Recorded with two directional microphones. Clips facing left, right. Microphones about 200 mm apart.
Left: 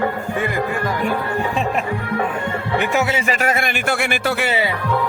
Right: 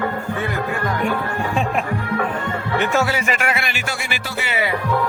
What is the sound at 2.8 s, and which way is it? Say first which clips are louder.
Speech: even; 15° left (ahead or behind).